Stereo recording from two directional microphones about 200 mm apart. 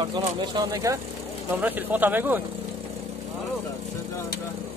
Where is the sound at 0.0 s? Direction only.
25° right (ahead or behind).